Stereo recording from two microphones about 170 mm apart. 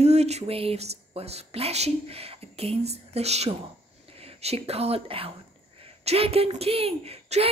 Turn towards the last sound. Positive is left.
turn(degrees=-35)  # may be behind; listen again after turning